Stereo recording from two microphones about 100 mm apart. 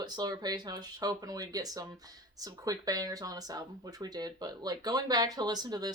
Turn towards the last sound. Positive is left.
turn(degrees=-40)  # may be behind; listen again after turning